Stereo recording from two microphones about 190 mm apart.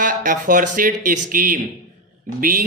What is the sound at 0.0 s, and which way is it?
A man's voice, 45° right (ahead or behind).